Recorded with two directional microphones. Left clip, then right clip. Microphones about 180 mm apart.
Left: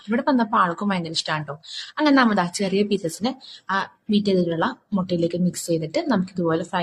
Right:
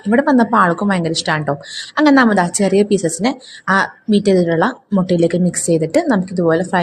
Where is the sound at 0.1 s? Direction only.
40° right (ahead or behind).